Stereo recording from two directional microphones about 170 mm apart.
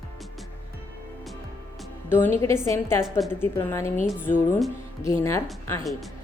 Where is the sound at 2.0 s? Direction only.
15° left (ahead or behind).